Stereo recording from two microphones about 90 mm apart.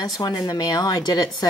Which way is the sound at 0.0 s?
50° left (ahead or behind).